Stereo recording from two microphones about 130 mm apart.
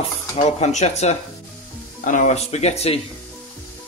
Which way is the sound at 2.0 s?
80° left.